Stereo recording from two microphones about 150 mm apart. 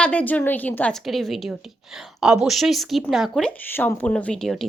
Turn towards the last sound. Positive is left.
turn(degrees=0)  # may be behind; listen again after turning